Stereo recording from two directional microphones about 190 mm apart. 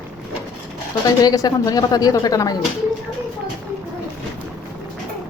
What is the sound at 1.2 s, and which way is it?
Speech, 20° left (ahead or behind).